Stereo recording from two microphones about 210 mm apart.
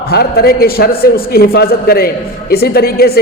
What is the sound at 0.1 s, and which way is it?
A woman's voice, 50° left (ahead or behind).